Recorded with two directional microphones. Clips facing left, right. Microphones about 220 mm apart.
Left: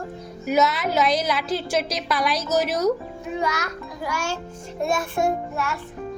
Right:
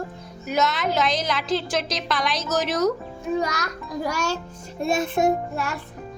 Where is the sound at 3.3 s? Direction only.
40° right (ahead or behind).